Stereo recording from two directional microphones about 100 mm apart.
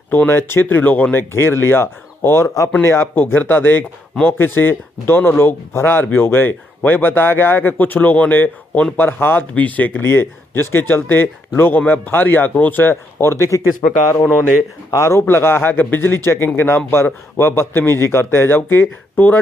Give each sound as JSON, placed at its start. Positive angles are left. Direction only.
{"t": 0.1, "sound": "speech", "side_deg": 20}
{"t": 14.9, "sound": "speech", "side_deg": 30}